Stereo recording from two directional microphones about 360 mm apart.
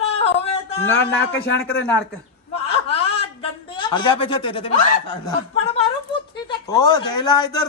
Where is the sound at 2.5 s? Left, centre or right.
Centre.